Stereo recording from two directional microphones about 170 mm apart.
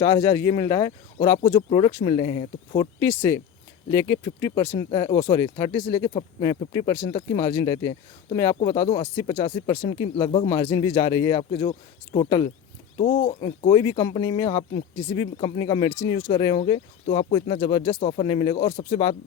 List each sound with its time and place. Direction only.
0.0 s speech: 20° left (ahead or behind)